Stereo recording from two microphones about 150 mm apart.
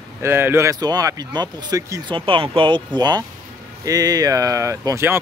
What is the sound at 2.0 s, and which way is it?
Speech, 35° right (ahead or behind).